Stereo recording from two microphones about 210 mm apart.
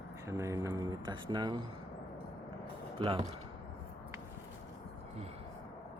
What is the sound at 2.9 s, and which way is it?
Speech, 25° right (ahead or behind).